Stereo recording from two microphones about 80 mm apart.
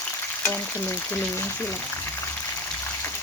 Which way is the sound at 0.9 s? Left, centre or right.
Left.